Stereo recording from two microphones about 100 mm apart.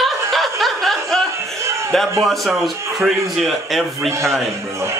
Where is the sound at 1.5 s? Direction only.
30° right (ahead or behind).